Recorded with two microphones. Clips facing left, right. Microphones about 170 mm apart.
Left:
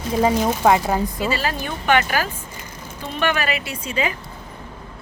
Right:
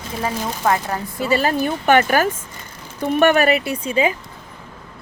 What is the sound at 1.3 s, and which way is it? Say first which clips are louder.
Speech: right 6 dB; 45° right (ahead or behind).